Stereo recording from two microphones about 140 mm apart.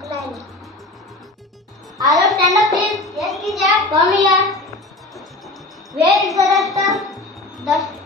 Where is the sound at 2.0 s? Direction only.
25° right (ahead or behind).